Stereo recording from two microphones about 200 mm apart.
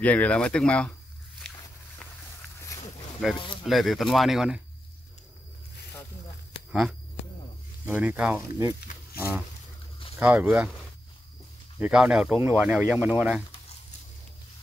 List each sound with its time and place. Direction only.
0.0 s speech: 5° left (ahead or behind)
3.6 s speech: centre (ahead or behind)
6.7 s speech: 5° right (ahead or behind)
10.1 s speech: 5° right (ahead or behind)
11.8 s speech: 5° right (ahead or behind)